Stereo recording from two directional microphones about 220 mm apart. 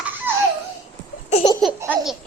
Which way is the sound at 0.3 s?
10° right (ahead or behind).